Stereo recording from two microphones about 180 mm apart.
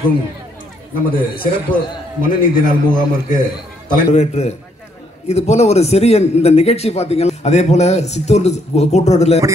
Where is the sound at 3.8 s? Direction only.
40° left (ahead or behind).